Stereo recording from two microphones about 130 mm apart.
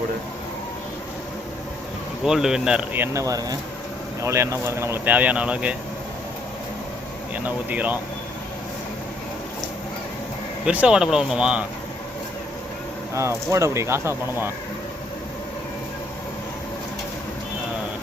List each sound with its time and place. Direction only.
2.2 s speech: 5° right (ahead or behind)
3.0 s speech: 25° right (ahead or behind)
7.3 s speech: 10° right (ahead or behind)
10.7 s speech: 10° right (ahead or behind)
13.1 s speech: 20° right (ahead or behind)